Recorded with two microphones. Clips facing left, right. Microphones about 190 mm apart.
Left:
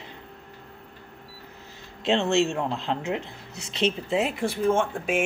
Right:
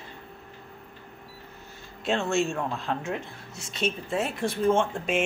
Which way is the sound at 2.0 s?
20° left (ahead or behind).